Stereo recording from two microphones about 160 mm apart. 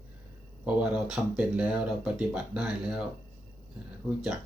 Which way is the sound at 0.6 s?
10° right (ahead or behind).